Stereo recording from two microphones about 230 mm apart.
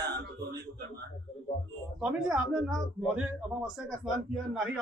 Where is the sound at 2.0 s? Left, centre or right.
Centre.